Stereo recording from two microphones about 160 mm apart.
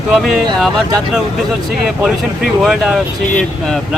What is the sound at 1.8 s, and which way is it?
Speech, centre (ahead or behind).